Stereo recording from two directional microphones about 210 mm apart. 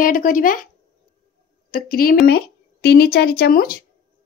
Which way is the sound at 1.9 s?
45° left (ahead or behind).